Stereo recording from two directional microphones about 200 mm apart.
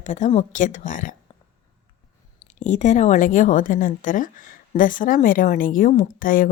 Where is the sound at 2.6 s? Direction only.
35° left (ahead or behind).